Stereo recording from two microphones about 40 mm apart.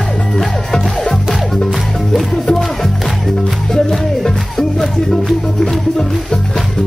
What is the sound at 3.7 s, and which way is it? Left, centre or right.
Music, centre.